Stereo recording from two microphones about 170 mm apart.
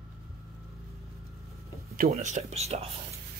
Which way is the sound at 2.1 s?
40° right (ahead or behind).